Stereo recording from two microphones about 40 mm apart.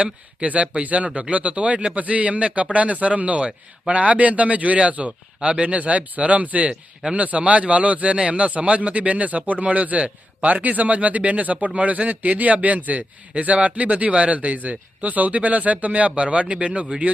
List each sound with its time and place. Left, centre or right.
0.0 s a man's voice: right